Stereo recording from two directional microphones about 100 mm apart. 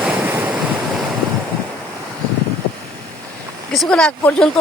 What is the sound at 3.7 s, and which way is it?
Speech, 5° left (ahead or behind).